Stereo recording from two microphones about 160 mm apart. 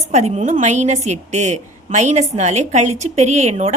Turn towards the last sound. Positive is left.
turn(degrees=-45)  # may be behind; listen again after turning